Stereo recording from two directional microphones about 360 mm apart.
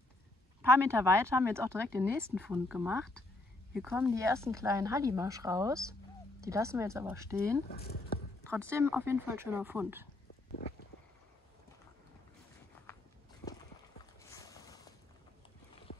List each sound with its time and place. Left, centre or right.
0.6 s a woman's voice: centre
7.7 s speech: left
8.6 s speech: centre
14.2 s a sound: centre